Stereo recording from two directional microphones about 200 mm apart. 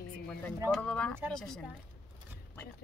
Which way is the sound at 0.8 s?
5° left (ahead or behind).